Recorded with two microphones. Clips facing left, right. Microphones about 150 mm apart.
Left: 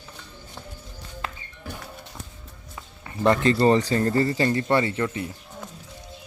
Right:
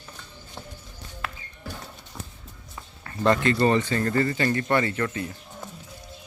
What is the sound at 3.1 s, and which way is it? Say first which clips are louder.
Speech: left 1 dB; 20° left (ahead or behind).